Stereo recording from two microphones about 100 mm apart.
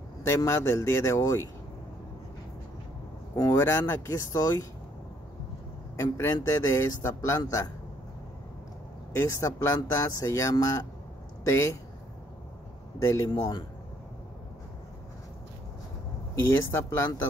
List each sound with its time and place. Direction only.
0.5 s speech: 25° left (ahead or behind)
3.3 s speech: 40° left (ahead or behind)
3.6 s a man's voice: 25° left (ahead or behind)
5.9 s a man's voice: 30° left (ahead or behind)
9.1 s a man's voice: 30° left (ahead or behind)
13.0 s a man's voice: 30° left (ahead or behind)
13.3 s speech: 45° left (ahead or behind)
16.4 s speech: 25° left (ahead or behind)